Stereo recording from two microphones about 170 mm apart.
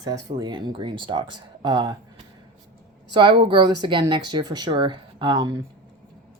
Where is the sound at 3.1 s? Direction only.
30° right (ahead or behind).